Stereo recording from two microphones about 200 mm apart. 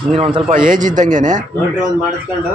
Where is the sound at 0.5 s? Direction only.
40° right (ahead or behind).